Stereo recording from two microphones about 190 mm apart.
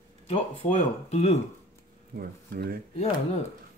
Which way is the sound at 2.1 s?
55° right (ahead or behind).